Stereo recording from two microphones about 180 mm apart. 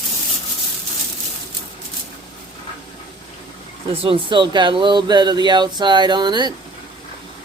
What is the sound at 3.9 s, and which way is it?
Speech, 30° right (ahead or behind).